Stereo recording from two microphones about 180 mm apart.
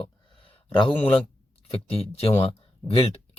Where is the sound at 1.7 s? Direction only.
30° left (ahead or behind).